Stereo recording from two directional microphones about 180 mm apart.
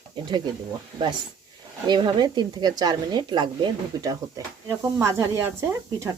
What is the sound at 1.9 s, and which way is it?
Speech, 25° right (ahead or behind).